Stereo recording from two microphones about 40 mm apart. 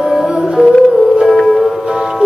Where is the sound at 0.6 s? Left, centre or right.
Right.